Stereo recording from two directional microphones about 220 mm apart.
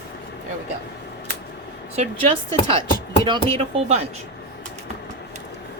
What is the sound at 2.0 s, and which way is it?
Speech, 25° right (ahead or behind).